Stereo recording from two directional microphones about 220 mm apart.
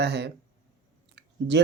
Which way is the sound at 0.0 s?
50° right (ahead or behind).